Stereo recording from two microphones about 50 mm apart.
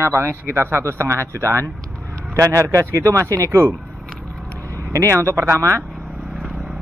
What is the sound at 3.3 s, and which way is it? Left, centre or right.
Speech, right.